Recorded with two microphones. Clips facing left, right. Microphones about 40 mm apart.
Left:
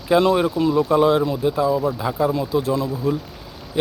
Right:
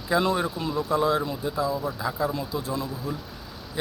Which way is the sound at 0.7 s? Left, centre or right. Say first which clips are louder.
Left 7 dB; left.